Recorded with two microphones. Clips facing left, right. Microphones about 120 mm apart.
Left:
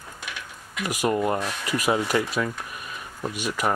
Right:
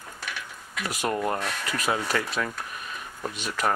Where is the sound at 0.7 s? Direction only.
10° left (ahead or behind).